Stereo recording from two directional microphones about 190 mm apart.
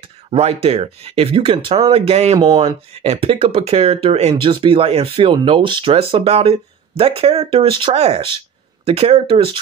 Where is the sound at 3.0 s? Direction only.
30° right (ahead or behind).